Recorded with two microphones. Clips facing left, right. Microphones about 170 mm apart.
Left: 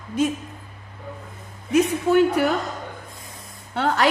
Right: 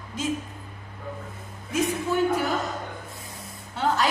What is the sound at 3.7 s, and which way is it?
Speech, 70° left (ahead or behind).